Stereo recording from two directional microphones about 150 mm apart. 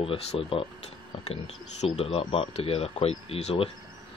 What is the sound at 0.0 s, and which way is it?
Speech, 40° left (ahead or behind).